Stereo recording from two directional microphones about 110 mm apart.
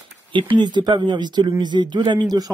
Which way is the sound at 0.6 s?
40° right (ahead or behind).